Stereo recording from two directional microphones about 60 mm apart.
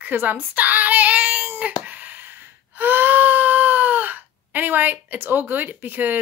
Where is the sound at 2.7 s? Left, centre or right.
Right.